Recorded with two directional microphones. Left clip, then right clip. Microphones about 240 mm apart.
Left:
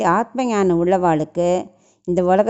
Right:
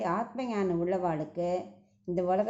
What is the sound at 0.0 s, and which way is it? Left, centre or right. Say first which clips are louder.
A woman's voice: left 14 dB; left.